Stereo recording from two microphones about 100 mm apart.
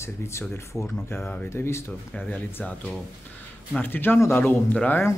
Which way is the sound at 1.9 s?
10° left (ahead or behind).